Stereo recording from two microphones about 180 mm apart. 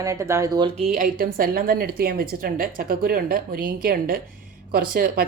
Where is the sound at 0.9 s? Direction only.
55° right (ahead or behind).